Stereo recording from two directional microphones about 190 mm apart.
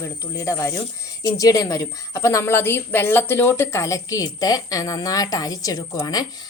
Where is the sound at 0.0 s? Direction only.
15° left (ahead or behind).